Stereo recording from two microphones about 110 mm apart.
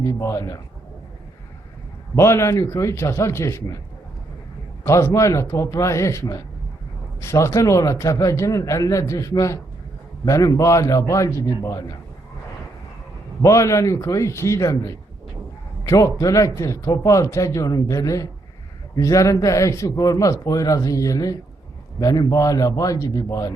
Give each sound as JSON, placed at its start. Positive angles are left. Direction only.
{"t": 0.0, "sound": "a man's voice", "side_deg": 30}
{"t": 2.1, "sound": "a man's voice", "side_deg": 25}
{"t": 4.8, "sound": "a man's voice", "side_deg": 25}
{"t": 13.4, "sound": "a man's voice", "side_deg": 30}